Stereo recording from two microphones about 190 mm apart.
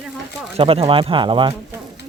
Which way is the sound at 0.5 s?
30° right (ahead or behind).